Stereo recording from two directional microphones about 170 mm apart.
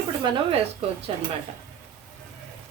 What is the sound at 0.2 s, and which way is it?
Speech, 30° right (ahead or behind).